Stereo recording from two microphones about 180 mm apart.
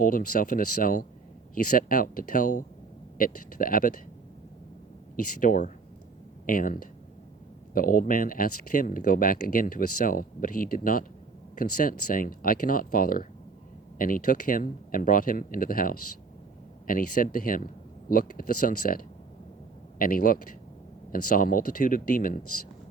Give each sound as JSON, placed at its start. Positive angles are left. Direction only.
{"t": 0.0, "sound": "speech", "side_deg": 50}
{"t": 5.1, "sound": "speech", "side_deg": 50}